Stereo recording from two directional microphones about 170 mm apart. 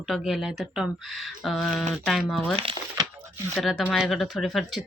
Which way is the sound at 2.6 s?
30° right (ahead or behind).